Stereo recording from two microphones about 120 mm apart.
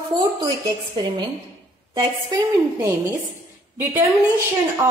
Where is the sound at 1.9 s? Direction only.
35° right (ahead or behind).